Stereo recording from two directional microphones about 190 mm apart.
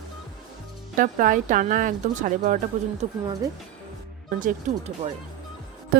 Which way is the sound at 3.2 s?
20° right (ahead or behind).